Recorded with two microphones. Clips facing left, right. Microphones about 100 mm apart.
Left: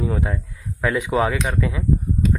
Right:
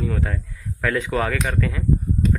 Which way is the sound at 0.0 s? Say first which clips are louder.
Left 2 dB; 20° left (ahead or behind).